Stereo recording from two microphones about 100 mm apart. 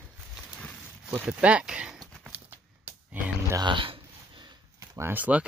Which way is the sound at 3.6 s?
55° right (ahead or behind).